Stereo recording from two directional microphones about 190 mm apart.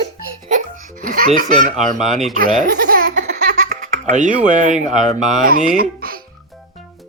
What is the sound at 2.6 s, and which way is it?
Laughter, 50° right (ahead or behind).